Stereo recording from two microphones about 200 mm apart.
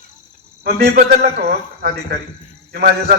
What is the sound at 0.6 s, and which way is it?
A man's voice, 55° right (ahead or behind).